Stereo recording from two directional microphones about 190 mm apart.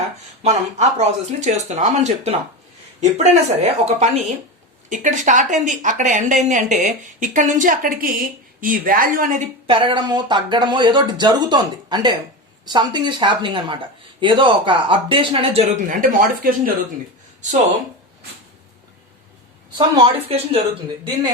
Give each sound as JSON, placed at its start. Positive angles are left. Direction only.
{"t": 0.4, "sound": "speech", "side_deg": -35}
{"t": 9.6, "sound": "speech", "side_deg": -25}
{"t": 19.7, "sound": "speech", "side_deg": -25}